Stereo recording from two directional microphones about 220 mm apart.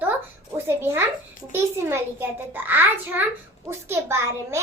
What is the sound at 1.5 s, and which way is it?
Child singing, 10° right (ahead or behind).